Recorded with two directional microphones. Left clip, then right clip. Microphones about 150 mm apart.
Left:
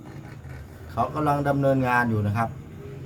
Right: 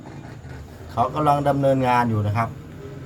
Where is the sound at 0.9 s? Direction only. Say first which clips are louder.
Right 5 dB; 5° left (ahead or behind).